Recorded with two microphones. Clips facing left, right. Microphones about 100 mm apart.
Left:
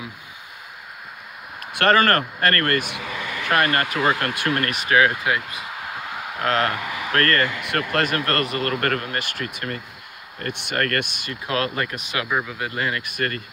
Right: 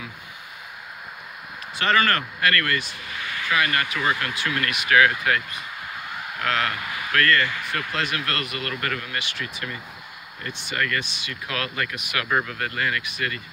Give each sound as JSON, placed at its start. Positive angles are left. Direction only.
{"t": 1.7, "sound": "a sound", "side_deg": 60}
{"t": 2.0, "sound": "speech", "side_deg": 45}
{"t": 6.4, "sound": "speech", "side_deg": 35}
{"t": 7.6, "sound": "speech", "side_deg": 60}
{"t": 11.4, "sound": "speech", "side_deg": 35}
{"t": 12.4, "sound": "speech", "side_deg": 15}
{"t": 13.0, "sound": "speech", "side_deg": 45}